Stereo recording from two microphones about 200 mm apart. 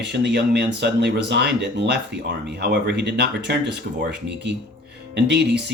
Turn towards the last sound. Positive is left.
turn(degrees=-60)  # may be behind; listen again after turning